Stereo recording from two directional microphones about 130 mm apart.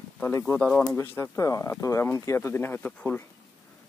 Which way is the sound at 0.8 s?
20° left (ahead or behind).